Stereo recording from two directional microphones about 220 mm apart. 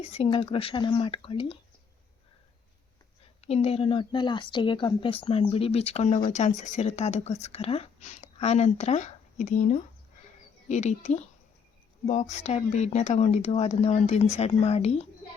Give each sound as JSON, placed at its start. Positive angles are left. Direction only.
{"t": 0.0, "sound": "speech", "side_deg": 25}
{"t": 3.4, "sound": "speech", "side_deg": 30}